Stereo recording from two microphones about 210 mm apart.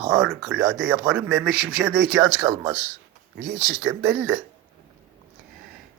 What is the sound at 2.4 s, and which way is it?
Speech, 15° right (ahead or behind).